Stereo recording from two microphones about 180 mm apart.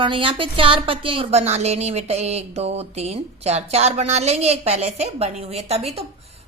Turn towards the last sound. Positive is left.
turn(degrees=-35)  # may be behind; listen again after turning